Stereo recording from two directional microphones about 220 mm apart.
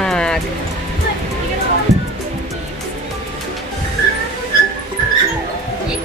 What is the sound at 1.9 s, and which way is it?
Music, 15° right (ahead or behind).